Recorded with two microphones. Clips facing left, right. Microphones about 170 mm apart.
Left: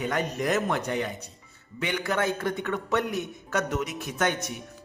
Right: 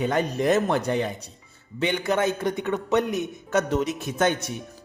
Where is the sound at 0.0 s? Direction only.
30° right (ahead or behind).